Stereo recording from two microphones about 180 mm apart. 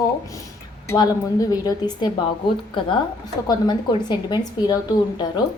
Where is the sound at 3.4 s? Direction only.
25° left (ahead or behind).